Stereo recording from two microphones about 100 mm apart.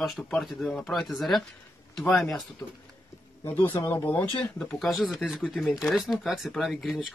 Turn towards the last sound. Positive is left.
turn(degrees=0)  # may be behind; listen again after turning